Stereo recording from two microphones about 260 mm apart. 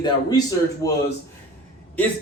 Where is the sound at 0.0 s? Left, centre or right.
Centre.